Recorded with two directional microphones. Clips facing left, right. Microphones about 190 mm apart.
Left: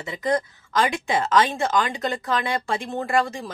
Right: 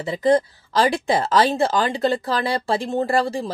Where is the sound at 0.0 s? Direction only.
35° right (ahead or behind).